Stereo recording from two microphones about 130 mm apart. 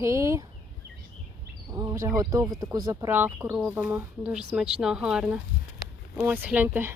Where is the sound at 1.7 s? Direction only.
25° right (ahead or behind).